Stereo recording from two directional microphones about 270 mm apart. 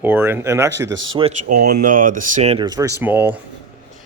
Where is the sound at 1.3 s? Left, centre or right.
Right.